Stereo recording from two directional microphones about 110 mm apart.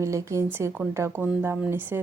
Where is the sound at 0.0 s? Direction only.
25° right (ahead or behind).